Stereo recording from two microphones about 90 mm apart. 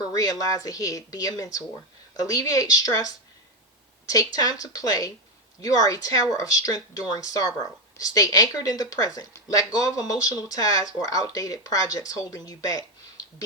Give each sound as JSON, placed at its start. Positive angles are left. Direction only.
{"t": 0.1, "sound": "speech", "side_deg": 40}